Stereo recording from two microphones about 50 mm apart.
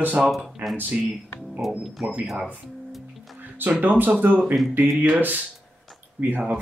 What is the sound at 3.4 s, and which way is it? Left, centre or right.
Speech, right.